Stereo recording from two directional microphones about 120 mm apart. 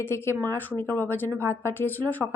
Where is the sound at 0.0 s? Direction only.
20° left (ahead or behind).